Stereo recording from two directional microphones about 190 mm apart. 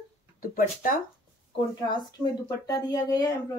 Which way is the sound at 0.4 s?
50° left (ahead or behind).